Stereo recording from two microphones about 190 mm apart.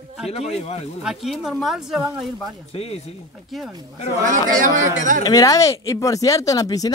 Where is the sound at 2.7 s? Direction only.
30° left (ahead or behind).